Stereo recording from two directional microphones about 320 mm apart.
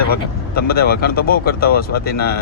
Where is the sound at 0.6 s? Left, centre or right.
Left.